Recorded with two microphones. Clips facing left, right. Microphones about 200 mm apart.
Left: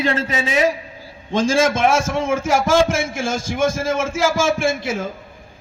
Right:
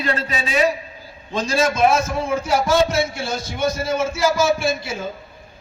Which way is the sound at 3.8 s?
90° left.